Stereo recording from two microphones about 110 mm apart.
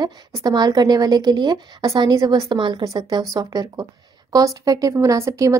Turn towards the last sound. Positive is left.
turn(degrees=-30)  # may be behind; listen again after turning